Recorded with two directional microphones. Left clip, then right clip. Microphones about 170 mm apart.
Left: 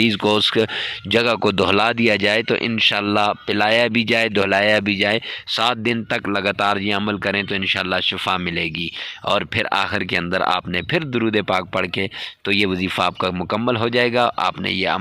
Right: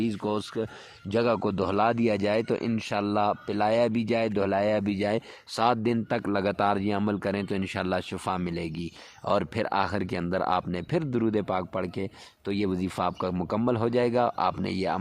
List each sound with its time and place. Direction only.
0.4 s speech: 45° left (ahead or behind)
1.1 s speech: 10° left (ahead or behind)